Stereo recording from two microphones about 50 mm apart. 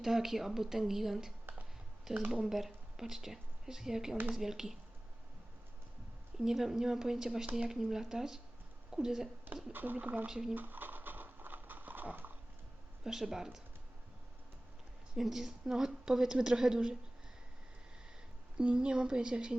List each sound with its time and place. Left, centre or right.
0.0 s a woman's voice: centre
2.3 s a woman's voice: centre
6.4 s a woman's voice: centre
9.7 s speech: right
10.2 s a woman's voice: centre
10.5 s a sound: right
13.1 s a woman's voice: centre
15.1 s a woman's voice: centre
18.5 s a woman's voice: centre